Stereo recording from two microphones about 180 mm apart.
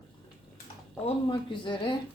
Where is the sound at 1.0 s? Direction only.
25° left (ahead or behind).